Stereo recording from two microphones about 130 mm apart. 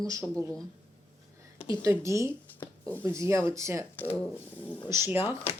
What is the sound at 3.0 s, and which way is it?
Speech, 20° right (ahead or behind).